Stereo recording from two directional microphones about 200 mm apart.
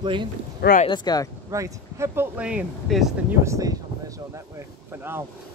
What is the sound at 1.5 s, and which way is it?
Speech, 15° right (ahead or behind).